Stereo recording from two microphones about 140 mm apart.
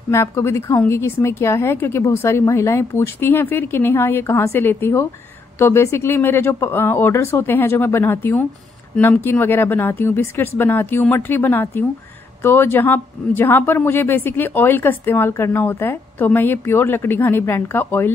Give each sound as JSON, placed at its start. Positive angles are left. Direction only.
{"t": 0.1, "sound": "speech", "side_deg": 20}